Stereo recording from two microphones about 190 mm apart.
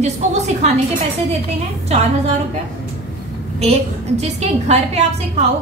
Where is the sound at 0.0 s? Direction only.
35° right (ahead or behind).